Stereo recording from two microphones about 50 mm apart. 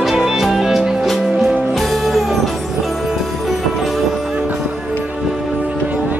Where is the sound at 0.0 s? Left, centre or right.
Centre.